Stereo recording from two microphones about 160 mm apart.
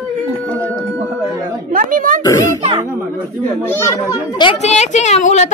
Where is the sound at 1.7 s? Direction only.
60° right (ahead or behind).